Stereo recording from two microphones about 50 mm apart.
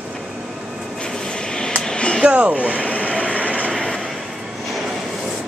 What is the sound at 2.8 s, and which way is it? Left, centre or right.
Train, left.